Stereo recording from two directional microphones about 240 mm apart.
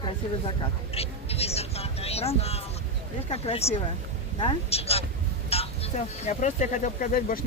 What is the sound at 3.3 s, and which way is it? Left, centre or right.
A woman's voice, left.